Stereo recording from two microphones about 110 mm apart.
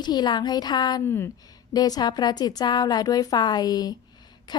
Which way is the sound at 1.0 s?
20° left (ahead or behind).